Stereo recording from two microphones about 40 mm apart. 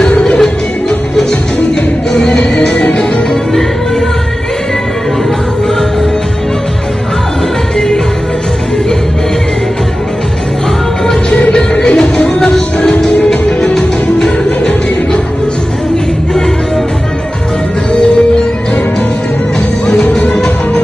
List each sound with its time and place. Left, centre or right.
0.4 s music: centre
11.9 s music: left
12.4 s music: centre
13.2 s music: left